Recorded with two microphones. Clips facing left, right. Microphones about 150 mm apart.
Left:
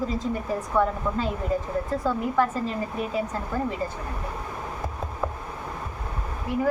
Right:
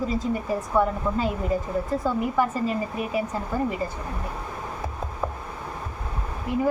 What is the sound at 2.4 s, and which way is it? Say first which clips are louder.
Speech: left 1 dB; 10° right (ahead or behind).